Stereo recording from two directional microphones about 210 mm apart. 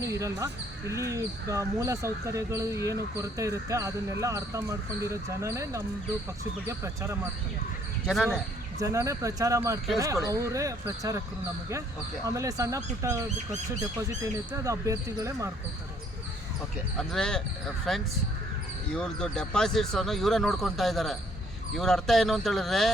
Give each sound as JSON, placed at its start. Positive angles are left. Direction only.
{"t": 0.0, "sound": "speech", "side_deg": -15}
{"t": 8.0, "sound": "speech", "side_deg": 0}
{"t": 8.8, "sound": "speech", "side_deg": -15}
{"t": 12.2, "sound": "speech", "side_deg": -15}
{"t": 14.5, "sound": "speech", "side_deg": -15}
{"t": 17.0, "sound": "speech", "side_deg": 5}